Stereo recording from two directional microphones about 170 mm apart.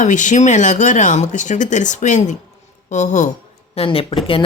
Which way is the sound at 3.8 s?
35° left (ahead or behind).